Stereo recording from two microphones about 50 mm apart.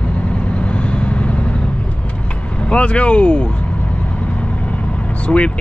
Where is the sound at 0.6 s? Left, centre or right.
Left.